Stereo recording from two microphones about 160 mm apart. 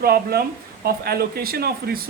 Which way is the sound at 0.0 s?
75° right (ahead or behind).